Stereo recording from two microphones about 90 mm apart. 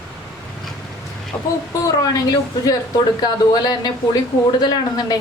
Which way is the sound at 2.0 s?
45° left (ahead or behind).